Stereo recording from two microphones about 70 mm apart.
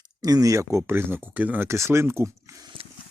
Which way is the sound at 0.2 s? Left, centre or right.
Right.